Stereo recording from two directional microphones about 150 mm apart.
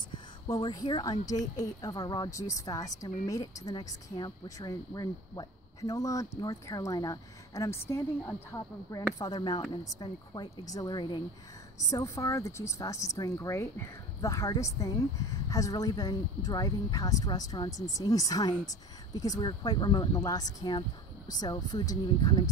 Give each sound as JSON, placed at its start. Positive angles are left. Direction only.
{"t": 0.5, "sound": "speech", "side_deg": 25}